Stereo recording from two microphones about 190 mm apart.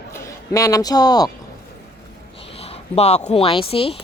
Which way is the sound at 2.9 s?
35° left (ahead or behind).